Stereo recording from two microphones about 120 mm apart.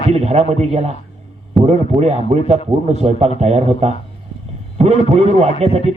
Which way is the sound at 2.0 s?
65° right (ahead or behind).